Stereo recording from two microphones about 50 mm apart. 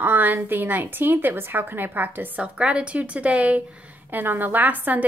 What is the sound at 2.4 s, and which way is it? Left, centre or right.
A woman's voice, right.